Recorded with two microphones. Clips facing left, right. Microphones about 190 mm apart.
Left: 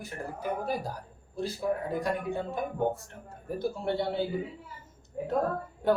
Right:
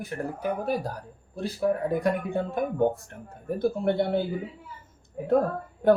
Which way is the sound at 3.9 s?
55° right (ahead or behind).